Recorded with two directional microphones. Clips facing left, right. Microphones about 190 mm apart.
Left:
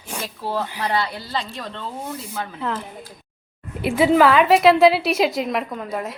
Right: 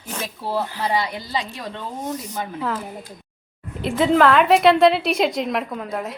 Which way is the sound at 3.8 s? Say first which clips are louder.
Left 1 dB; 10° left (ahead or behind).